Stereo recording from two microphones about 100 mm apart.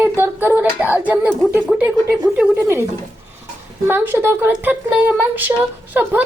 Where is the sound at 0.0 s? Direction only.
20° right (ahead or behind).